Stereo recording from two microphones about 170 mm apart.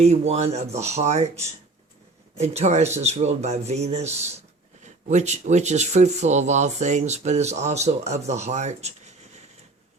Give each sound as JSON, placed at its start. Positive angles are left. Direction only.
{"t": 0.0, "sound": "speech", "side_deg": -40}